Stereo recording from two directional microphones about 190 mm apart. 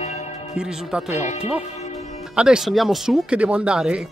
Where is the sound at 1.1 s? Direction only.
40° left (ahead or behind).